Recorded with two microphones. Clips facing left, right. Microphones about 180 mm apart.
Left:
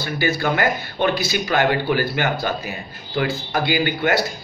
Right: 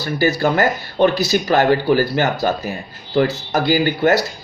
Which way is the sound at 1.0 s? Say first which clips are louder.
Right 6 dB; 45° right (ahead or behind).